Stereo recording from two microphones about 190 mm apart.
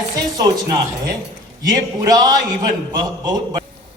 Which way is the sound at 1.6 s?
20° right (ahead or behind).